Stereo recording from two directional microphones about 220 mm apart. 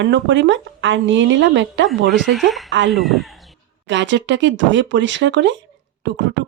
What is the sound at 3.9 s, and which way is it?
Speech, 55° right (ahead or behind).